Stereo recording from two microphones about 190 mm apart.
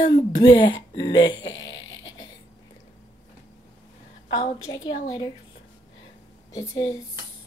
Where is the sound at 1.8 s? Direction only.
20° left (ahead or behind).